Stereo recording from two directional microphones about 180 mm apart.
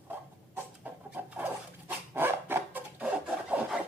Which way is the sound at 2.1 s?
10° right (ahead or behind).